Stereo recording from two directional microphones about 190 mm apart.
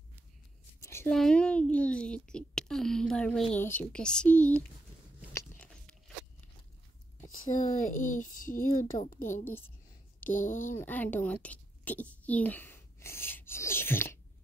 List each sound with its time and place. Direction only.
0.7 s a sound: 15° left (ahead or behind)
1.1 s speech: 5° left (ahead or behind)
5.3 s biting: 5° left (ahead or behind)
7.5 s speech: 45° left (ahead or behind)
9.4 s a woman's voice: 10° left (ahead or behind)
10.2 s speech: 45° left (ahead or behind)
10.7 s a woman's voice: 10° left (ahead or behind)
11.4 s writing: 10° left (ahead or behind)